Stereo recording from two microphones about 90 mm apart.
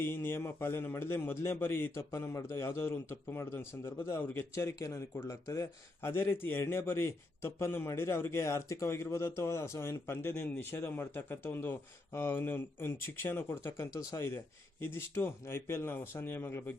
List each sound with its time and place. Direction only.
0.0 s a man's voice: 25° left (ahead or behind)
4.7 s speech: 40° left (ahead or behind)
6.0 s a man's voice: 25° left (ahead or behind)